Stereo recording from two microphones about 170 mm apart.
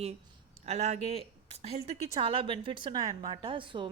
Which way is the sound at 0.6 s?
40° right (ahead or behind).